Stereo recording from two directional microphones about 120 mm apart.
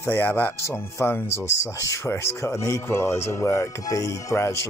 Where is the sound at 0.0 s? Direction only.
15° left (ahead or behind).